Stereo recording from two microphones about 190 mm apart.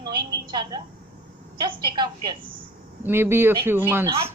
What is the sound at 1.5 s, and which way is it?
Speech, 25° right (ahead or behind).